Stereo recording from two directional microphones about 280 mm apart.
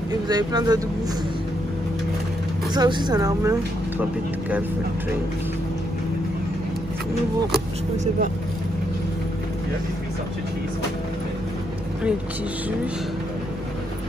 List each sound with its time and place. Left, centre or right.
0.3 s speech: centre
2.7 s speech: centre
7.5 s speech: right